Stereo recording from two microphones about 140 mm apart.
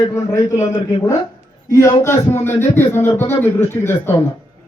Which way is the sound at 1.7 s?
25° left (ahead or behind).